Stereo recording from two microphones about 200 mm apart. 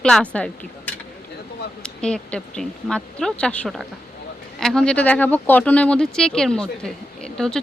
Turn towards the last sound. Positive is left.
turn(degrees=5)  # may be behind; listen again after turning